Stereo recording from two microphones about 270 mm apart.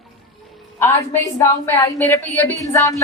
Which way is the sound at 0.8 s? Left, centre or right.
Centre.